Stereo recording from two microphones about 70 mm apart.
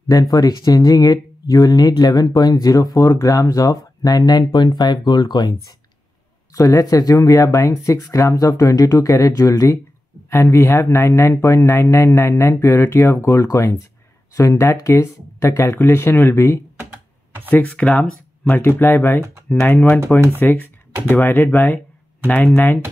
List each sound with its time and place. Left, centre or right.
0.1 s speech: left
3.1 s speech: left
6.5 s speech: left
17.5 s speech: centre
18.4 s speech: left